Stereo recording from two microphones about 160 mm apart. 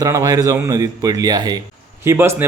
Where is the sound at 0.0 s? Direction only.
20° right (ahead or behind).